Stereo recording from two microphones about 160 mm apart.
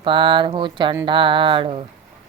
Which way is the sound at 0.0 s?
30° right (ahead or behind).